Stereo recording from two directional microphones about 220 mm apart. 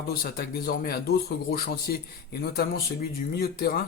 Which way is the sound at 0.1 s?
45° left (ahead or behind).